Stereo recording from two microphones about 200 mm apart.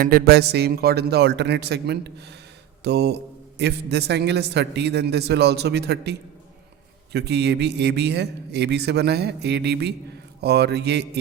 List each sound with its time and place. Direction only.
0.0 s a man's voice: 50° right (ahead or behind)